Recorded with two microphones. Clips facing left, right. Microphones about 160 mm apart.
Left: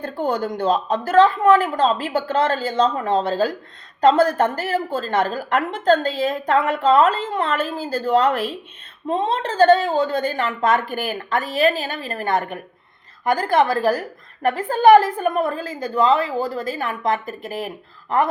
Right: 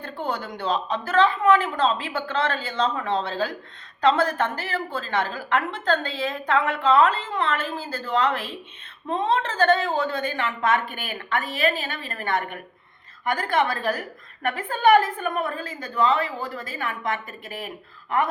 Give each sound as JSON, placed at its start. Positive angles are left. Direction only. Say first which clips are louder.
{"t": 0.0, "sound": "a woman's voice", "louder": "left 7 dB", "side_deg": 40}